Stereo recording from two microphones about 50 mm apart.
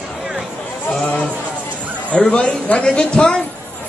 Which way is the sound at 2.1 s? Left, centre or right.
Left.